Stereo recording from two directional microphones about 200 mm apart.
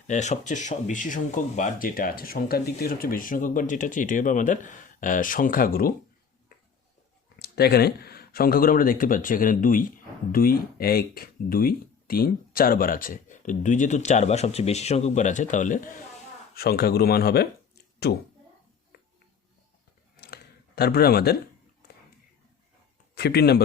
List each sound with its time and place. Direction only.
0.1 s speech: 35° left (ahead or behind)
7.3 s speech: 50° left (ahead or behind)
16.6 s speech: 50° left (ahead or behind)
20.2 s a sound: 50° left (ahead or behind)
23.1 s speech: 55° left (ahead or behind)